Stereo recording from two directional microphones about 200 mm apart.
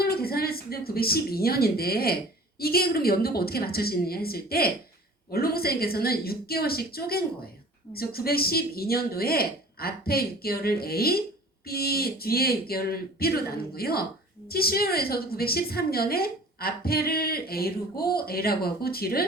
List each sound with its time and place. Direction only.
0.0 s a woman's voice: 50° left (ahead or behind)